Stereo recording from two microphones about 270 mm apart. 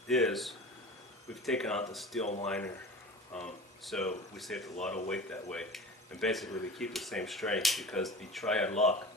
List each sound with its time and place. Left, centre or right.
0.1 s speech: centre
2.2 s speech: left
2.5 s speech: centre